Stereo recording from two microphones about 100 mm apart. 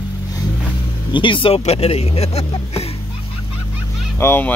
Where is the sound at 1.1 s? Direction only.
55° left (ahead or behind).